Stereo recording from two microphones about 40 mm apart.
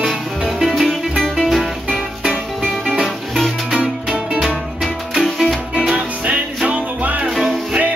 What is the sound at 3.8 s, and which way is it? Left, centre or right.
Music, right.